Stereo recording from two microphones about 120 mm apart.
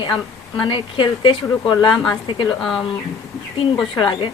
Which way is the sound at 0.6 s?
45° left (ahead or behind).